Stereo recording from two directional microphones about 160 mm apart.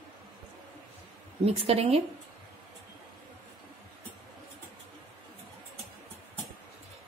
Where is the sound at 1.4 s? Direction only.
35° right (ahead or behind).